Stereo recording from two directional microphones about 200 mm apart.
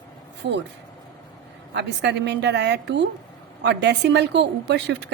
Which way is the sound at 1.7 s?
60° right (ahead or behind).